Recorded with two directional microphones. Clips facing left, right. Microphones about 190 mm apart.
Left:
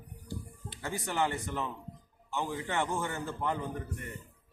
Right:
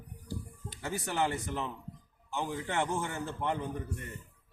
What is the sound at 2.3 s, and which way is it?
A man's voice, 15° right (ahead or behind).